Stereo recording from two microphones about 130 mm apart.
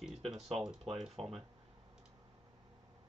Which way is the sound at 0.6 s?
Centre (ahead or behind).